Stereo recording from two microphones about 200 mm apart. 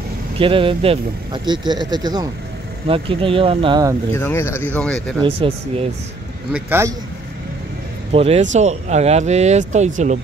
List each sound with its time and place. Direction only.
0.4 s speech: 25° right (ahead or behind)
4.1 s speech: 15° left (ahead or behind)
5.2 s speech: 25° right (ahead or behind)
6.5 s a man's voice: 10° right (ahead or behind)
8.1 s speech: 30° right (ahead or behind)